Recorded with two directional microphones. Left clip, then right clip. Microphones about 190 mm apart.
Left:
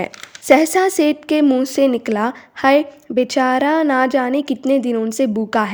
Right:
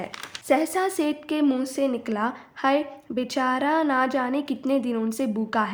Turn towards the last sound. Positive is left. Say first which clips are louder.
# left 7 dB
turn(degrees=40)  # may be behind; listen again after turning